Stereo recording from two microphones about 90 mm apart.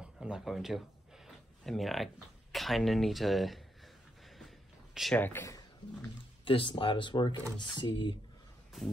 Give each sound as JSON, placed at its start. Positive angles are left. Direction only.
{"t": 0.0, "sound": "a sound", "side_deg": -5}
{"t": 2.5, "sound": "speech", "side_deg": 0}
{"t": 5.1, "sound": "speech", "side_deg": 20}
{"t": 6.4, "sound": "speech", "side_deg": 75}